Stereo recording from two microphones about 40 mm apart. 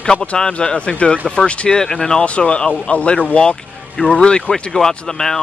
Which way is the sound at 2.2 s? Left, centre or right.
Left.